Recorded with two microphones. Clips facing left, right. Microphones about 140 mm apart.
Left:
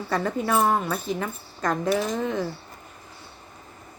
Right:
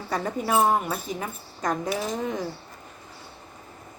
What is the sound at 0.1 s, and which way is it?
A woman's voice, 10° right (ahead or behind).